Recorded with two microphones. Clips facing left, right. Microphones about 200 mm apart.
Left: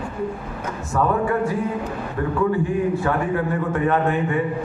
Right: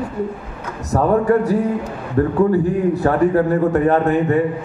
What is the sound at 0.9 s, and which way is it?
Speech, 40° right (ahead or behind).